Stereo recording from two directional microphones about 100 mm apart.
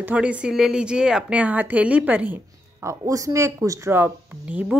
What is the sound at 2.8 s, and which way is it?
A woman's voice, 30° right (ahead or behind).